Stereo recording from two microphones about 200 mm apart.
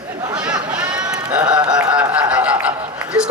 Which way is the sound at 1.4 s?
20° right (ahead or behind).